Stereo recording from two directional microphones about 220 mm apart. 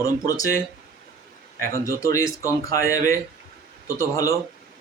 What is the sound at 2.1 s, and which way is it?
Speech, 15° left (ahead or behind).